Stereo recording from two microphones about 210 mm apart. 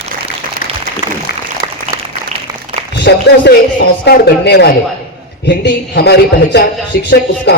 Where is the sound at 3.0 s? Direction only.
55° left (ahead or behind).